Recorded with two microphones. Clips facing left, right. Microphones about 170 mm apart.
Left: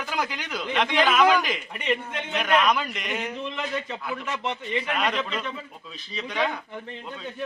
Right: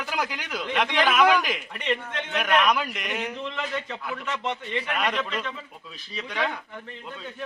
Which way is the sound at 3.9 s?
10° left (ahead or behind).